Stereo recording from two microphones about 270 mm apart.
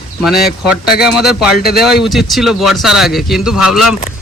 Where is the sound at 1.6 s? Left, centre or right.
Left.